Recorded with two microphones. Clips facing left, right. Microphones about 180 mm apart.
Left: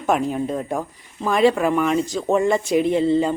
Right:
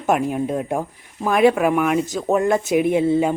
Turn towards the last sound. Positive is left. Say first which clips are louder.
# right 1 dB
turn(degrees=-10)  # may be behind; listen again after turning